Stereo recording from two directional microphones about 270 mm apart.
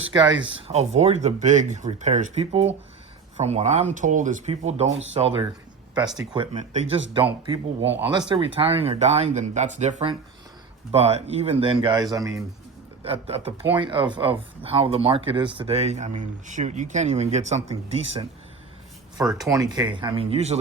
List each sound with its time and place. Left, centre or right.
0.1 s speech: centre
7.9 s speech: centre
8.3 s speech: centre
19.2 s speech: centre